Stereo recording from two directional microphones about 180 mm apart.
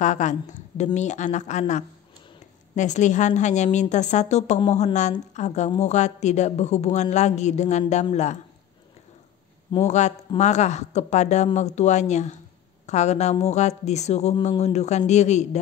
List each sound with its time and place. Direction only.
0.0 s a woman's voice: 40° left (ahead or behind)
9.8 s a woman's voice: 40° left (ahead or behind)